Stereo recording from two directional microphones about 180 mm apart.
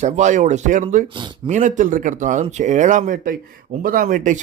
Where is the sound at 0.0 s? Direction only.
40° right (ahead or behind).